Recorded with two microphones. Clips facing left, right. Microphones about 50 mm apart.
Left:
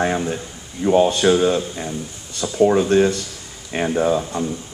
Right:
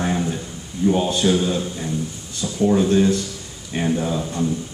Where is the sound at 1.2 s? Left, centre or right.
Left.